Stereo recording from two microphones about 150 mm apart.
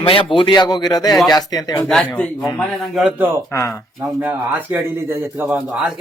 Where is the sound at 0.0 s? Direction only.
35° left (ahead or behind).